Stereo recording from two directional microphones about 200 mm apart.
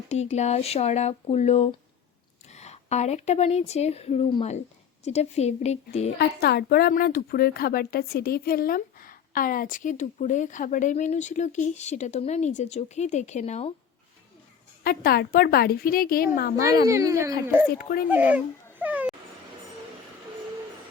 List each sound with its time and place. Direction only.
0.1 s a woman's voice: 35° left (ahead or behind)
6.1 s a woman's voice: 55° left (ahead or behind); by 13.7 s 30° left (ahead or behind)
14.8 s a woman's voice: 50° left (ahead or behind)
16.9 s speech: 15° right (ahead or behind)
17.7 s a woman's voice: 45° left (ahead or behind)
18.1 s babbling: 10° right (ahead or behind)